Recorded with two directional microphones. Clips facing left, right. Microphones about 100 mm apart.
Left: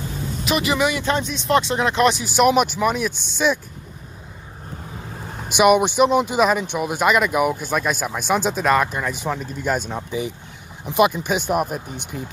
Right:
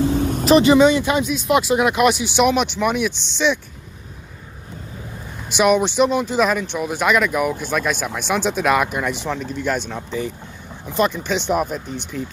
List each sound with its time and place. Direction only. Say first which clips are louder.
0.4 s speech: right 8 dB; 35° right (ahead or behind)
1.0 s speech: right 2 dB; 5° right (ahead or behind)
5.6 s speech: left 1 dB; 10° left (ahead or behind); by 9.1 s 5° right (ahead or behind)
9.1 s speech: right 1 dB; 5° left (ahead or behind)